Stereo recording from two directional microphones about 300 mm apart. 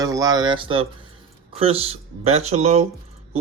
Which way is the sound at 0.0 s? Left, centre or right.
Centre.